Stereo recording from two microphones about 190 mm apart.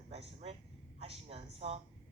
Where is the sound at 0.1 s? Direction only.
35° right (ahead or behind).